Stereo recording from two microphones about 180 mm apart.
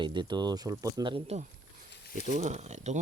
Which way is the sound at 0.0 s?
25° right (ahead or behind).